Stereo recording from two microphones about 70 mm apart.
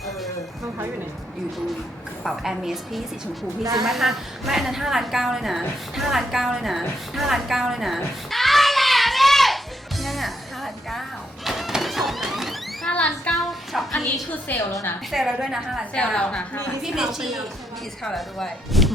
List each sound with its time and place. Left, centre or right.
2.2 s a woman's voice: centre
3.6 s a woman's voice: right
3.8 s a woman's voice: centre
10.0 s music: centre
12.9 s child singing: centre
13.3 s a sound: centre
14.5 s a woman's voice: left
15.1 s a woman's voice: centre
16.1 s a woman's voice: centre
16.8 s a woman's voice: centre
18.0 s a woman's voice: centre